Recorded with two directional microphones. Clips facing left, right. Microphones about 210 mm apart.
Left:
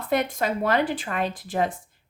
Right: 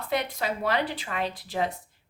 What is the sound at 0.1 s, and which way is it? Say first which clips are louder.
Speech: left 5 dB; 50° left (ahead or behind).